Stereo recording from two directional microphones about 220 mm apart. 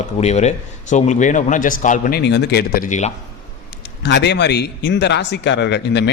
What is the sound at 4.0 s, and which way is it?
Speech, 50° left (ahead or behind).